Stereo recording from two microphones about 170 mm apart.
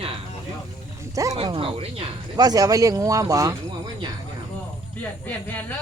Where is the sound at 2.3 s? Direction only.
20° right (ahead or behind).